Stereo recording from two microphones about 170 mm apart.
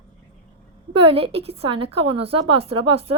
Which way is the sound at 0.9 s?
35° right (ahead or behind).